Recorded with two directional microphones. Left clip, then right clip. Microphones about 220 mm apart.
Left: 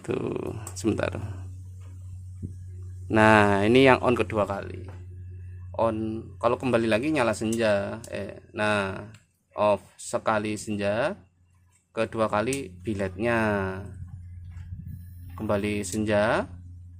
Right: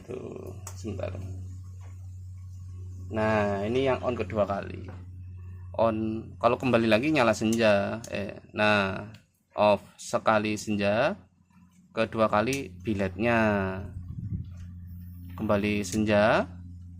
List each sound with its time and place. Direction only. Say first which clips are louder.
0.1 s speech: left 9 dB; 40° left (ahead or behind)
3.1 s speech: left 8 dB; 35° left (ahead or behind)
4.4 s speech: left 1 dB; 10° left (ahead or behind)
15.4 s speech: even; centre (ahead or behind)